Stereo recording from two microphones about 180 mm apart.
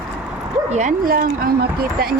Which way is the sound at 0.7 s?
45° right (ahead or behind).